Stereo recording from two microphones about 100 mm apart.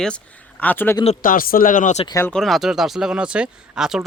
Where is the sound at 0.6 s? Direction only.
20° left (ahead or behind).